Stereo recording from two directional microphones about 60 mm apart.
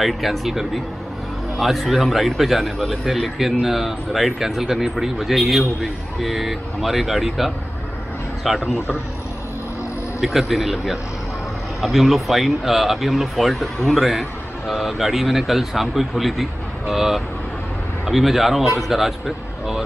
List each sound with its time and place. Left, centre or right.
0.0 s speech: centre
10.2 s speech: centre